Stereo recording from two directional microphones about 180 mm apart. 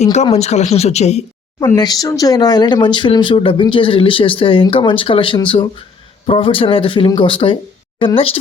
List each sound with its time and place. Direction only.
0.0 s speech: 40° left (ahead or behind)
1.5 s speech: 20° left (ahead or behind)